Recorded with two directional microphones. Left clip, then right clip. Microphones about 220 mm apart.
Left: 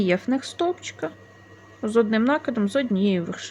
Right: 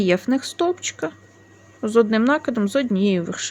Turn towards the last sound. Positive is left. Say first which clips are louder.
# right 3 dB
turn(degrees=-15)  # may be behind; listen again after turning